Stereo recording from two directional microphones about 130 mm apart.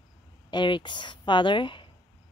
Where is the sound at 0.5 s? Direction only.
35° left (ahead or behind).